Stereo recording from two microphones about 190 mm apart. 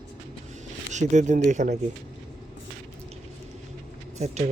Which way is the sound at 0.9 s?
40° right (ahead or behind).